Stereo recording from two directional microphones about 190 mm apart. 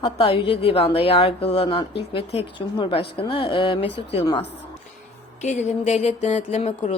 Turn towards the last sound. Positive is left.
turn(degrees=35)  # may be behind; listen again after turning